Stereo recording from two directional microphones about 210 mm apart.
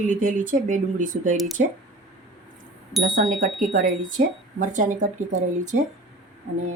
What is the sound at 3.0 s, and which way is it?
Speech, 65° right (ahead or behind).